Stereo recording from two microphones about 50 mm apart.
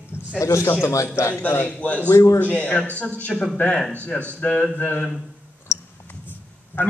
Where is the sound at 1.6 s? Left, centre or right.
Left.